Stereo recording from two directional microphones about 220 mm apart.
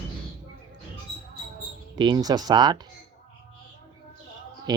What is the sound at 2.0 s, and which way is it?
Speech, 20° right (ahead or behind).